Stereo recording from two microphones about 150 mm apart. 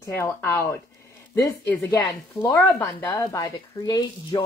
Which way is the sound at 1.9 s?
30° left (ahead or behind).